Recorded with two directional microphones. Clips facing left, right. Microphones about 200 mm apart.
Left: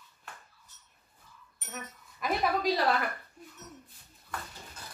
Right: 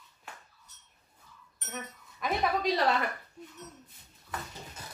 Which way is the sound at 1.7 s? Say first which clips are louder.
Right 2 dB; 5° left (ahead or behind).